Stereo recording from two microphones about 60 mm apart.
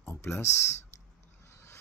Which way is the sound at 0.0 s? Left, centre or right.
Left.